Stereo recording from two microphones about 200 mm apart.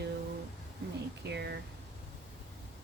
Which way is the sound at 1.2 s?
55° right (ahead or behind).